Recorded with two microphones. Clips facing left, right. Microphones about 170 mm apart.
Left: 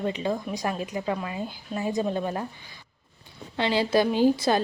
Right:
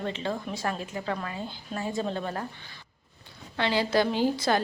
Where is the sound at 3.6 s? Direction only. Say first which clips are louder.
Left 2 dB; 20° left (ahead or behind).